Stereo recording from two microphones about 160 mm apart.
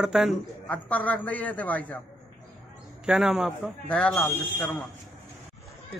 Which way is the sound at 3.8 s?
10° left (ahead or behind).